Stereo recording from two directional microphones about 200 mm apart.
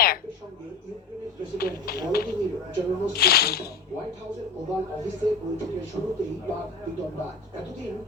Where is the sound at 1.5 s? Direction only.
50° left (ahead or behind).